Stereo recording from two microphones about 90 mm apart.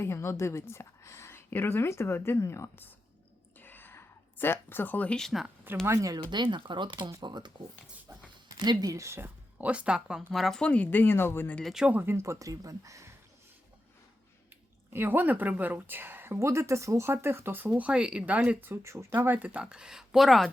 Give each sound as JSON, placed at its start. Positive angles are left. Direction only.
{"t": 0.0, "sound": "a woman's voice", "side_deg": 30}
{"t": 3.6, "sound": "a sound", "side_deg": 20}
{"t": 5.8, "sound": "speech", "side_deg": -35}
{"t": 6.3, "sound": "speech", "side_deg": -55}
{"t": 8.5, "sound": "speech", "side_deg": -50}
{"t": 8.9, "sound": "speech", "side_deg": -35}
{"t": 10.6, "sound": "a woman's voice", "side_deg": 15}
{"t": 11.6, "sound": "speech", "side_deg": -5}
{"t": 11.9, "sound": "speech", "side_deg": -25}
{"t": 14.9, "sound": "a woman's voice", "side_deg": -25}